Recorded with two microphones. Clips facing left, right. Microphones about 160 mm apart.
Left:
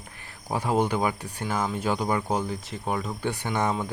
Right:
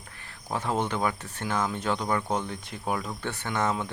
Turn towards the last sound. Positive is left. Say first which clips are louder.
# left 2 dB
turn(degrees=15)  # may be behind; listen again after turning